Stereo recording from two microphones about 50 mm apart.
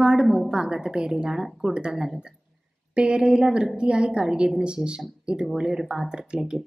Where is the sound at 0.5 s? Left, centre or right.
Centre.